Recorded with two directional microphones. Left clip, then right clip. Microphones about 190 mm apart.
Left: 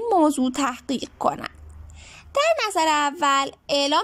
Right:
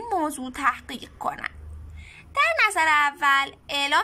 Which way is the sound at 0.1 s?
25° left (ahead or behind).